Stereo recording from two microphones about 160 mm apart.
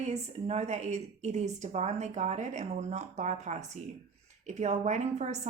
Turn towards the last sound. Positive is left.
turn(degrees=-45)  # may be behind; listen again after turning